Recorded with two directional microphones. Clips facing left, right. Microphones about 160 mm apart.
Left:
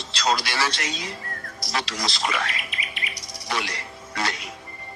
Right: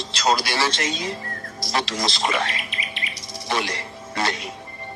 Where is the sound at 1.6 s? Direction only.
25° right (ahead or behind).